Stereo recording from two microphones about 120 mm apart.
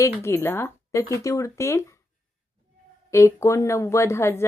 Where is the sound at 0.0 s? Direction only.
20° left (ahead or behind).